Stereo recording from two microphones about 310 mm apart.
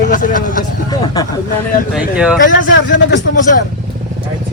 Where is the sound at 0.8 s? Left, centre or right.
Centre.